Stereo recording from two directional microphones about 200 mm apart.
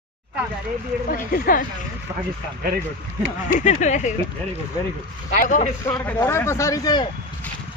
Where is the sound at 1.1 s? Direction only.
45° left (ahead or behind).